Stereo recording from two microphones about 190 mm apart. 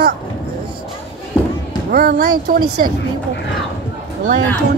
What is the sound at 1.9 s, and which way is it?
Speech, 45° right (ahead or behind).